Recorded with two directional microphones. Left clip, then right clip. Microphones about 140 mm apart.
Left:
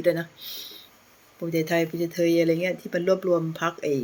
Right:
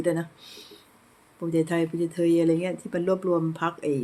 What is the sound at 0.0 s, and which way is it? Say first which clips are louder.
Speech: left 3 dB; 15° right (ahead or behind).